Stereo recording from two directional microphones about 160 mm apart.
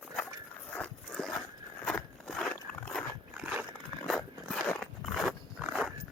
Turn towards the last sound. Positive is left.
turn(degrees=-5)  # may be behind; listen again after turning